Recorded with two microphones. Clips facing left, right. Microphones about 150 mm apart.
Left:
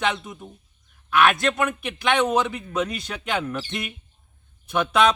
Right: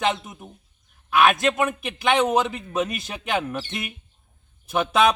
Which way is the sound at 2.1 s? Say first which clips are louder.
Right 1 dB; 20° right (ahead or behind).